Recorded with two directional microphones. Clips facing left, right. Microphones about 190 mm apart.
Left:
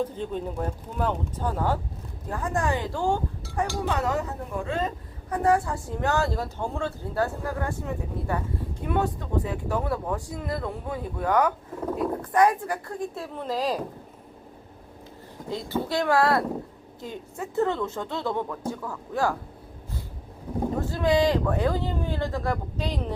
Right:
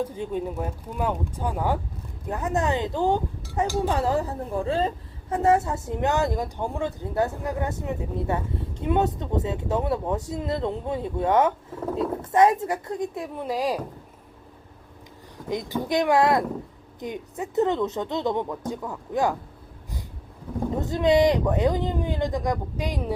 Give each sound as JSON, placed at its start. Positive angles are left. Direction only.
{"t": 0.0, "sound": "a woman's voice", "side_deg": -10}
{"t": 3.8, "sound": "a woman's voice", "side_deg": -30}
{"t": 15.4, "sound": "a woman's voice", "side_deg": -15}
{"t": 20.7, "sound": "speech", "side_deg": -20}